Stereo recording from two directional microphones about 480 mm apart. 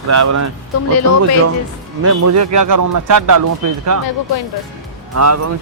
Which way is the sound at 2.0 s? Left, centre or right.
Right.